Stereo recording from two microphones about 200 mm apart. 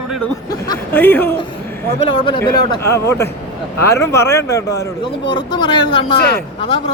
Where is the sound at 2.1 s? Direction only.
25° left (ahead or behind).